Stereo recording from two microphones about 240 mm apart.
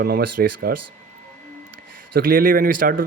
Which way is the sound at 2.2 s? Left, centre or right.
Right.